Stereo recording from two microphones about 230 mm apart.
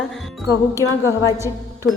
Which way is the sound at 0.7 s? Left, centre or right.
Centre.